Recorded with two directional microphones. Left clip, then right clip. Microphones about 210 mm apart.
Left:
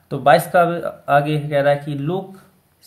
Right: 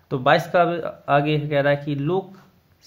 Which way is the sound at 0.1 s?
35° right (ahead or behind).